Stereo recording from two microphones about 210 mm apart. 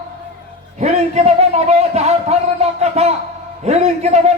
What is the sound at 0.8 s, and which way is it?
A man's voice, 30° right (ahead or behind).